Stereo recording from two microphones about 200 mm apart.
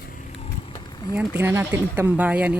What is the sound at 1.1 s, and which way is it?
Speech, 10° right (ahead or behind).